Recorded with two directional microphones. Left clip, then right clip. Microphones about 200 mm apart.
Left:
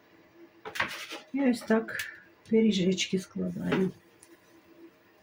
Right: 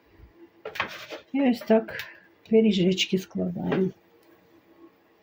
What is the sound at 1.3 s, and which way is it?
Speech, 35° right (ahead or behind).